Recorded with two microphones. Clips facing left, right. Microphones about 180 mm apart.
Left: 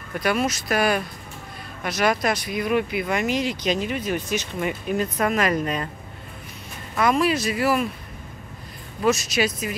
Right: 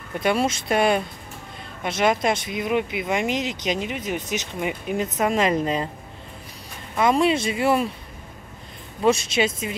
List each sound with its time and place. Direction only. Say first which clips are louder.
0.2 s speech: right 1 dB; 25° right (ahead or behind)
7.0 s speech: right 1 dB; 25° right (ahead or behind)
9.0 s speech: right 1 dB; 30° right (ahead or behind)